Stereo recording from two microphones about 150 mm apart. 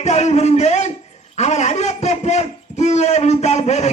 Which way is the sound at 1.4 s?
50° left (ahead or behind).